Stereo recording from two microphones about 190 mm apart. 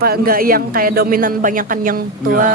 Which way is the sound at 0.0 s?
50° right (ahead or behind).